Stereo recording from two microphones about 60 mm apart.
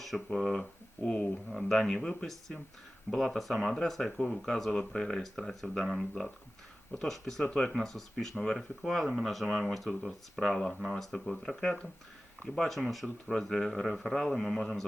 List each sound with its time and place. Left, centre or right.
0.0 s speech: centre
0.6 s speech: centre
1.7 s speech: centre